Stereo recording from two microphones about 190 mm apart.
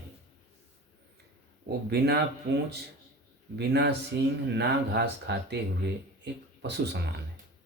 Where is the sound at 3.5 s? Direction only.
60° right (ahead or behind).